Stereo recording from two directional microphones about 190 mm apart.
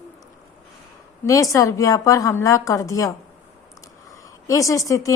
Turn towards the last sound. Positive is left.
turn(degrees=15)  # may be behind; listen again after turning